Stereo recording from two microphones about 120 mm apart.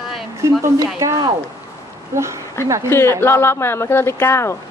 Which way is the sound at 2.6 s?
20° left (ahead or behind).